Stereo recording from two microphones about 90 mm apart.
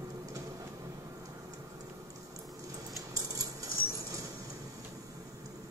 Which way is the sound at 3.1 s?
40° right (ahead or behind).